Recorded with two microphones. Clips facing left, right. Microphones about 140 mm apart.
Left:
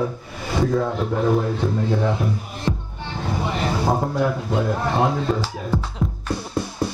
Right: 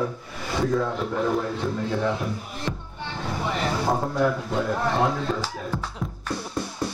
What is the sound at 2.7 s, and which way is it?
Music, 25° left (ahead or behind).